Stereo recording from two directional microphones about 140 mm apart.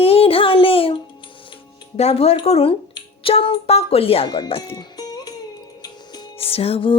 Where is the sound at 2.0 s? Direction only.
50° left (ahead or behind).